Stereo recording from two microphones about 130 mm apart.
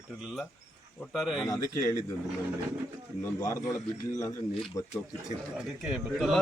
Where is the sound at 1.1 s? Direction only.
5° right (ahead or behind).